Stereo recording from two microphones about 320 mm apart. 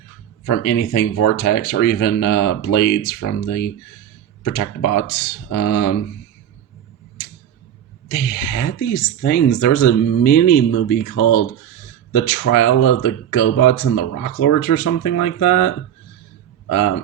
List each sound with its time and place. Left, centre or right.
0.4 s a woman's voice: left
8.0 s a woman's voice: left